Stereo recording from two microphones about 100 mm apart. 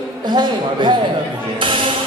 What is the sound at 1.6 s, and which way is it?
Music, 60° right (ahead or behind).